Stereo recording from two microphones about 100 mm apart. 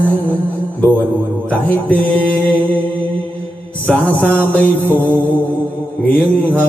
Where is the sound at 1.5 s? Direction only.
15° left (ahead or behind).